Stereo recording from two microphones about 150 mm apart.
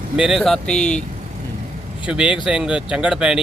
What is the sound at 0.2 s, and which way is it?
Speech, 5° right (ahead or behind).